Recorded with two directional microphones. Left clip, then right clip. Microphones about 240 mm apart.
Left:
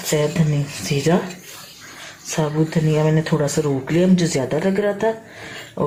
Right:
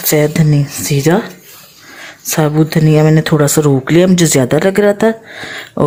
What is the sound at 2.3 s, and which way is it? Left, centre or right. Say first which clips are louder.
Speech: right 8 dB; right.